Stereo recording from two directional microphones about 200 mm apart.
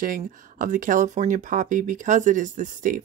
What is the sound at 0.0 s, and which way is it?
Speech, 45° right (ahead or behind).